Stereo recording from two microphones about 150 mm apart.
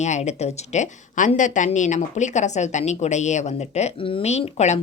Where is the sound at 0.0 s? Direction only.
50° left (ahead or behind).